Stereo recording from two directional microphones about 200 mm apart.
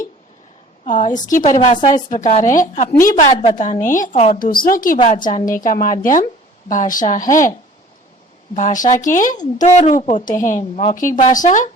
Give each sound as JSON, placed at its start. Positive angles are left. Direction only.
{"t": 0.9, "sound": "a woman's voice", "side_deg": 40}
{"t": 8.5, "sound": "a woman's voice", "side_deg": 40}